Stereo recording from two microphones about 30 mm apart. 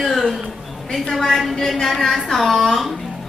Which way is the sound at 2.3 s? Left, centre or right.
Centre.